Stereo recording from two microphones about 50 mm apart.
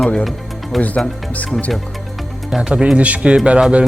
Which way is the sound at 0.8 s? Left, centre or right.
Left.